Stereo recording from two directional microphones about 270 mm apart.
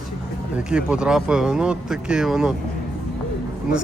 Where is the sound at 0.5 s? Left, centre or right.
Centre.